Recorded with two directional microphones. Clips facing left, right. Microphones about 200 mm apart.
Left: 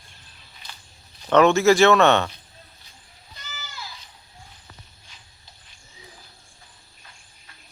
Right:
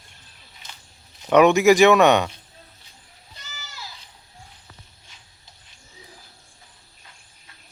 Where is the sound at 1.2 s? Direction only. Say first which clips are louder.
Right 1 dB; 15° right (ahead or behind).